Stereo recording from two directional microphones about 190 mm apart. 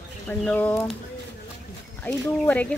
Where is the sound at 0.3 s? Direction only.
10° left (ahead or behind).